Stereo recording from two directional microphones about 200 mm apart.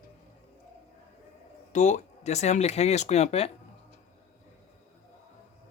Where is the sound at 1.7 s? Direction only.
35° left (ahead or behind).